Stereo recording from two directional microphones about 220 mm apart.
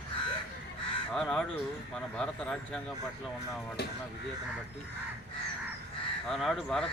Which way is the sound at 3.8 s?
45° left (ahead or behind).